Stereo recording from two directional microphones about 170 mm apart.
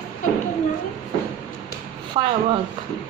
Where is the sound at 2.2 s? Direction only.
30° right (ahead or behind).